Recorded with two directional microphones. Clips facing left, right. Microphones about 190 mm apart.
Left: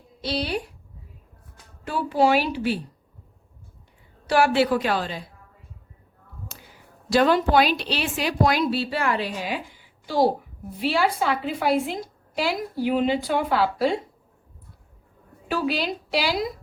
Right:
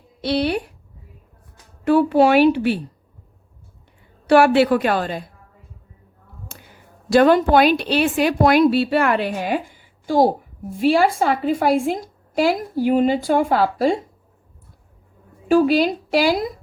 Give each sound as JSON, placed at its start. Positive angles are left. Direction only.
{"t": 0.2, "sound": "a woman's voice", "side_deg": -60}
{"t": 1.8, "sound": "a woman's voice", "side_deg": -60}
{"t": 4.3, "sound": "a woman's voice", "side_deg": -60}
{"t": 6.5, "sound": "a sound", "side_deg": -55}
{"t": 7.1, "sound": "a woman's voice", "side_deg": -55}
{"t": 15.4, "sound": "a woman's voice", "side_deg": -45}